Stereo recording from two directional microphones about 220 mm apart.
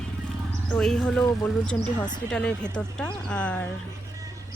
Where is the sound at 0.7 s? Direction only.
Centre (ahead or behind).